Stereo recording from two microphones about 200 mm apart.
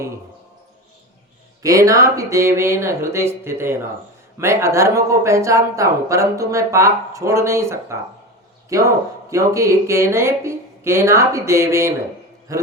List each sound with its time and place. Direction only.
1.6 s speech: 15° right (ahead or behind)